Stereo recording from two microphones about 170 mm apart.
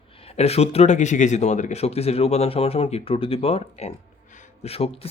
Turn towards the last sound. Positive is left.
turn(degrees=35)  # may be behind; listen again after turning